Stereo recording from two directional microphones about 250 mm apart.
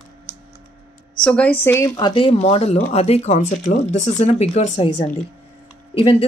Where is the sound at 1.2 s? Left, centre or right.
Centre; by 4.8 s left.